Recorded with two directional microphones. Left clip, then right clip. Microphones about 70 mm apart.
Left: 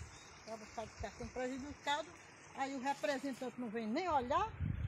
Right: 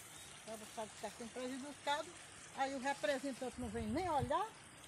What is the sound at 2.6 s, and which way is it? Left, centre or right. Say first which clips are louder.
Speech: even; left.